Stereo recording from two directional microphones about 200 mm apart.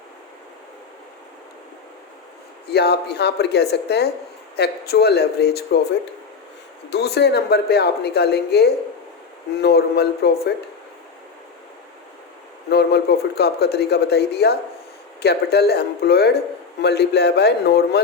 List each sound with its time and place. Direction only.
2.6 s a man's voice: 55° left (ahead or behind)
6.9 s a man's voice: 55° left (ahead or behind)
12.6 s a man's voice: 55° left (ahead or behind)